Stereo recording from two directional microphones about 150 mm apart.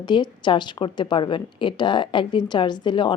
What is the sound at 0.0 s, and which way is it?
A woman's voice, 30° left (ahead or behind).